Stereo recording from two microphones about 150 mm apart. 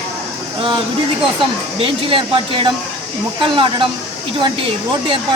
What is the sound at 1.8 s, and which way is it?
Speech, 35° right (ahead or behind).